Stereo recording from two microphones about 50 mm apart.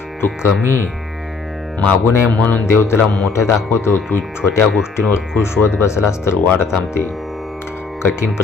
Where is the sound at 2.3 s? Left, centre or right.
Left.